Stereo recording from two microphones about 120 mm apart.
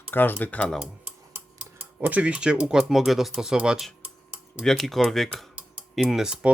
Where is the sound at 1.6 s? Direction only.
15° right (ahead or behind).